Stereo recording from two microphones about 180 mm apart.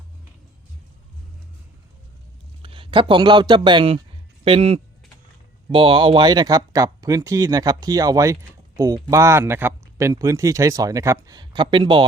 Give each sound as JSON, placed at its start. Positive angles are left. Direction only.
{"t": 2.6, "sound": "speech", "side_deg": -30}